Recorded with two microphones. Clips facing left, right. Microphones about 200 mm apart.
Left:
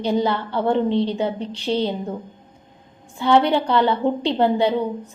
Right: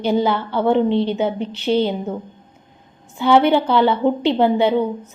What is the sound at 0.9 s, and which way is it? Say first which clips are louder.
A woman's voice: right 2 dB; 25° right (ahead or behind).